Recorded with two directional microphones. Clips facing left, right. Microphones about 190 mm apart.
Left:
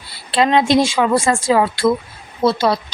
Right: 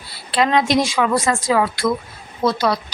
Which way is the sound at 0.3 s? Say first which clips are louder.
Left 3 dB; 25° left (ahead or behind).